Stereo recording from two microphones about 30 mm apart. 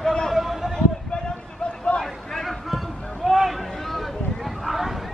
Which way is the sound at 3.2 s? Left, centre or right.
Centre.